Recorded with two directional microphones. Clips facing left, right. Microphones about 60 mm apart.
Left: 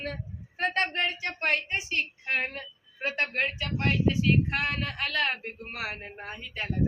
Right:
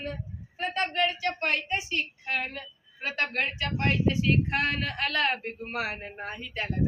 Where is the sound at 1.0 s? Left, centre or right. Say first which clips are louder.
Right 3 dB; left.